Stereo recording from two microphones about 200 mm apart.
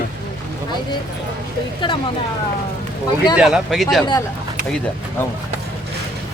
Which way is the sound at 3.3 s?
Centre (ahead or behind).